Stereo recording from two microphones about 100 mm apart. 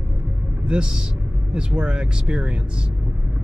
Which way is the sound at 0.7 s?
10° right (ahead or behind).